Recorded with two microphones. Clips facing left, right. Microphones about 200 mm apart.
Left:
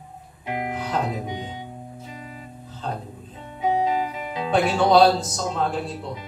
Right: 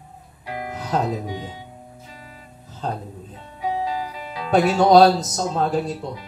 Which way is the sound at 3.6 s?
20° left (ahead or behind).